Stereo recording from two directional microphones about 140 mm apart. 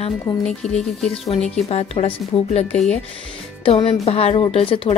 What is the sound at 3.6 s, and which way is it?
A woman's voice, 45° left (ahead or behind).